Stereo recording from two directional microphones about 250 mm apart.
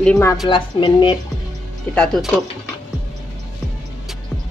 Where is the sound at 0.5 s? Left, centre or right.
Centre.